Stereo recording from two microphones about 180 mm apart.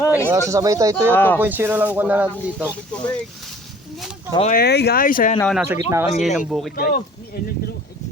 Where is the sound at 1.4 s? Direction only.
10° right (ahead or behind).